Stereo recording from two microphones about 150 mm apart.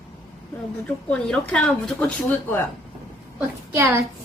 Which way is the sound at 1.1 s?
5° left (ahead or behind).